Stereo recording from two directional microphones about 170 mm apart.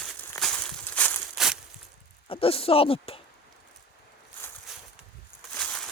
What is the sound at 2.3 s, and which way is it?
Speech, 35° left (ahead or behind).